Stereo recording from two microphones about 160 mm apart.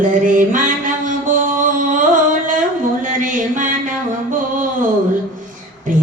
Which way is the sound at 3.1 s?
55° right (ahead or behind).